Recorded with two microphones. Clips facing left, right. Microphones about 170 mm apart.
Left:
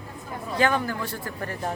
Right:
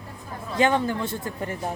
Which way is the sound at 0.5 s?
20° right (ahead or behind).